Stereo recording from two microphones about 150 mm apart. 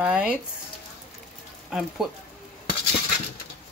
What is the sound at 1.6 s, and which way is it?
Speech, 5° right (ahead or behind).